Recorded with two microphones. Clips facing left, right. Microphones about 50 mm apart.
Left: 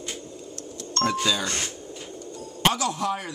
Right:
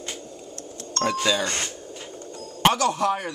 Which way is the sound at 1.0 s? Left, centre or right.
Centre.